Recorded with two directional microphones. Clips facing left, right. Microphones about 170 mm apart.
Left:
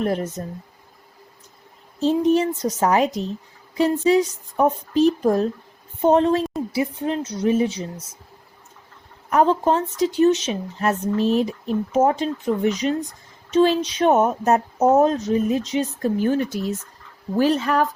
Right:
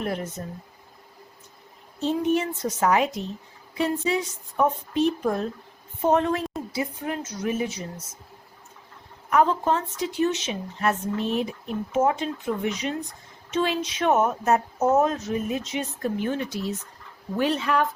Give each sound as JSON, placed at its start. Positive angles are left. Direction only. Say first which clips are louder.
{"t": 0.0, "sound": "speech", "louder": "left 6 dB", "side_deg": 40}
{"t": 2.0, "sound": "a woman's voice", "louder": "left 5 dB", "side_deg": 35}
{"t": 9.3, "sound": "speech", "louder": "left 4 dB", "side_deg": 35}